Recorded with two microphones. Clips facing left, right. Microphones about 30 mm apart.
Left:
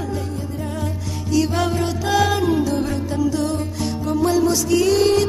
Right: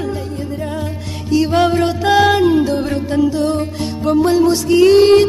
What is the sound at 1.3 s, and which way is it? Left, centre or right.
Music, right.